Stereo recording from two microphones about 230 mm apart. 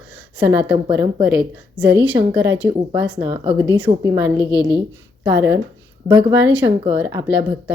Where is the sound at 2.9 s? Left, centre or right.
Centre.